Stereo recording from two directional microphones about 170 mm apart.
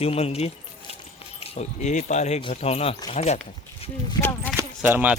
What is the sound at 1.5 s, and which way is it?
Speech, 45° left (ahead or behind).